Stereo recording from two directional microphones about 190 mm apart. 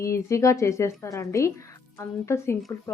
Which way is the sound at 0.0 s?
15° left (ahead or behind).